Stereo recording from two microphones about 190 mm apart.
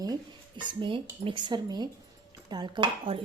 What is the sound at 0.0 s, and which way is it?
Speech, 20° right (ahead or behind).